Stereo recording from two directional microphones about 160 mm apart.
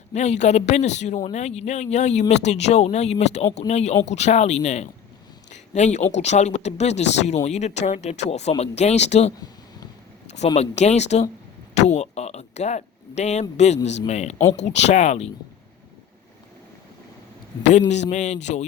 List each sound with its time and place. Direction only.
0.1 s speech: 45° left (ahead or behind)
5.5 s a sound: 45° left (ahead or behind)
6.1 s speech: 45° left (ahead or behind)
10.3 s speech: 45° left (ahead or behind)
18.1 s speech: 45° left (ahead or behind)